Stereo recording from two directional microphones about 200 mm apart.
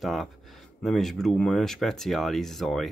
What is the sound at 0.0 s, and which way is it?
Speech, centre (ahead or behind).